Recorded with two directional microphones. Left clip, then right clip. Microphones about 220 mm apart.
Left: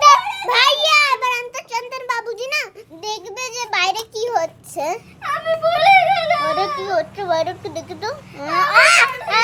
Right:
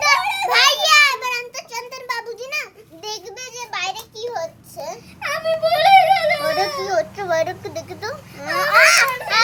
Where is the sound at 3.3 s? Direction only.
25° left (ahead or behind).